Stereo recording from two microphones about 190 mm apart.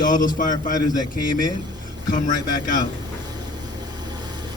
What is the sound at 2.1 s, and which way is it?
Speech, 45° left (ahead or behind).